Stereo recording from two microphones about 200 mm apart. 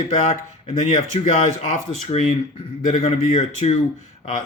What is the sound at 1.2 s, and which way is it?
Speech, 35° left (ahead or behind).